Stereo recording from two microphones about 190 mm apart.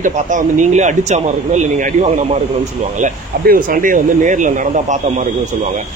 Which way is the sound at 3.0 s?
45° right (ahead or behind).